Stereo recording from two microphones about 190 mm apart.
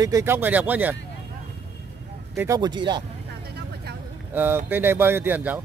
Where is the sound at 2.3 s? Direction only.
15° right (ahead or behind).